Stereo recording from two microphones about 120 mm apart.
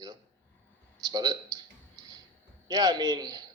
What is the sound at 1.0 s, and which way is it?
Speech, 35° right (ahead or behind).